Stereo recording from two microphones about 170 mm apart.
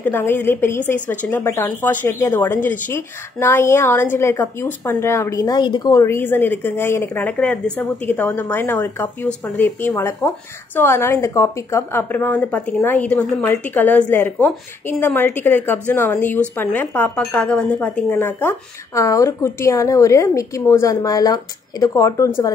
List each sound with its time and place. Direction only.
0.0 s a woman's voice: 10° left (ahead or behind)